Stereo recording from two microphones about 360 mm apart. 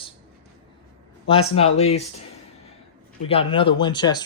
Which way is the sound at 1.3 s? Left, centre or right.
Centre.